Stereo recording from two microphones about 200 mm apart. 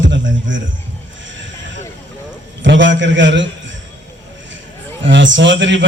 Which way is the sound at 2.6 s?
65° right (ahead or behind).